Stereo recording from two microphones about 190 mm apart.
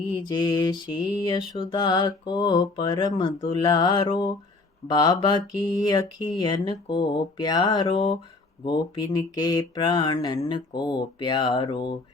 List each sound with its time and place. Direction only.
0.3 s speech: 20° left (ahead or behind)